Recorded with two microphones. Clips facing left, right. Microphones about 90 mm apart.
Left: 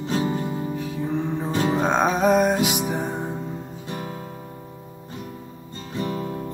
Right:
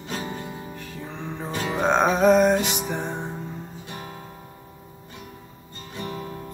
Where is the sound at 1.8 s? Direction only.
Centre (ahead or behind).